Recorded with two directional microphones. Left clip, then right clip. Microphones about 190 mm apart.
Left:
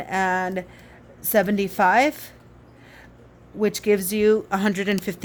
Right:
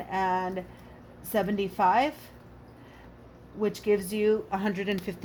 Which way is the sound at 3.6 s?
55° left (ahead or behind).